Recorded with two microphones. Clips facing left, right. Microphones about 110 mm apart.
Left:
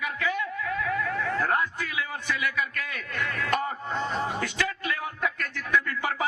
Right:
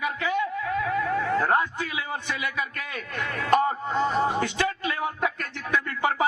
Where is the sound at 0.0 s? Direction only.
25° right (ahead or behind).